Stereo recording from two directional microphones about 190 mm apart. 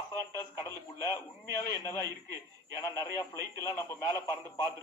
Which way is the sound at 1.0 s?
15° left (ahead or behind).